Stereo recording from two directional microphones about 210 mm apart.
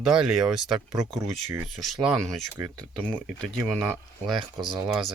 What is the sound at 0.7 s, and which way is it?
Speech, 15° right (ahead or behind).